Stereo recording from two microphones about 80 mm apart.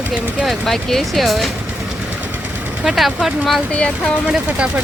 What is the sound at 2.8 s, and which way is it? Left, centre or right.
Speech, centre.